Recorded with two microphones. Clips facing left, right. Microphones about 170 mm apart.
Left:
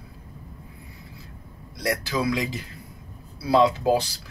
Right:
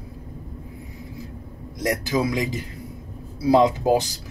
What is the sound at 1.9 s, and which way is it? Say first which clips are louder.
Speech: right 2 dB; 20° right (ahead or behind).